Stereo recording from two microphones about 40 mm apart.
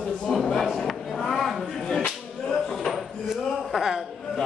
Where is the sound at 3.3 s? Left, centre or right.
Centre.